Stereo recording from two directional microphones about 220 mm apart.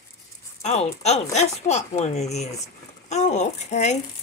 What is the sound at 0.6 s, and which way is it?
Speech, 30° left (ahead or behind).